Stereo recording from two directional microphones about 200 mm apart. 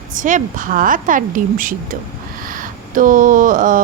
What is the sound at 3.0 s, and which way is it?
Speech, 40° right (ahead or behind).